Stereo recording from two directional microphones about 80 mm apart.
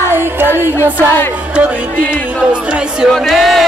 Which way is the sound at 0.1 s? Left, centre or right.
Right.